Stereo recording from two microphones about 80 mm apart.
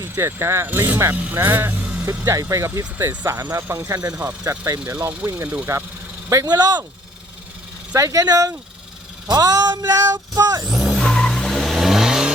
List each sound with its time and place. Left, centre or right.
0.0 s speech: right
1.1 s speech: right
1.8 s music: centre
2.2 s speech: right
3.8 s speech: right
5.0 s speech: right
5.7 s speech: right
6.3 s speech: right
7.9 s speech: right
10.7 s vehicle: centre
10.9 s vehicle: centre